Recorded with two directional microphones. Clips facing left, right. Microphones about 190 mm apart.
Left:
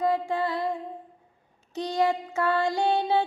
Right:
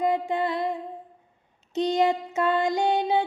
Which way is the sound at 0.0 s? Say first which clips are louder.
Right 1 dB; 20° right (ahead or behind).